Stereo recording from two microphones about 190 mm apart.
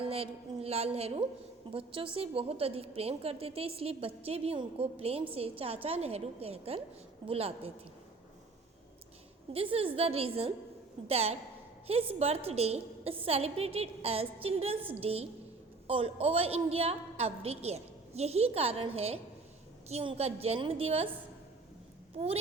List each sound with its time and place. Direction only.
0.0 s a woman's voice: 30° right (ahead or behind)
9.5 s a woman's voice: 30° right (ahead or behind)